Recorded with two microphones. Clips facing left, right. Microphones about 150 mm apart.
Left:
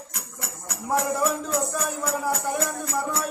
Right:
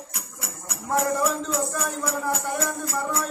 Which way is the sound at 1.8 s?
Centre (ahead or behind).